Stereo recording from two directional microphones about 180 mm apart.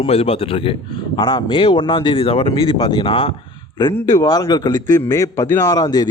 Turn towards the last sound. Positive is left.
turn(degrees=20)  # may be behind; listen again after turning